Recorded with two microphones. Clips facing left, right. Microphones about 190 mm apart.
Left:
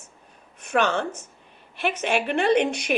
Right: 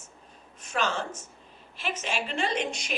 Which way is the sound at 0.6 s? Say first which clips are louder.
Left 7 dB; 60° left (ahead or behind).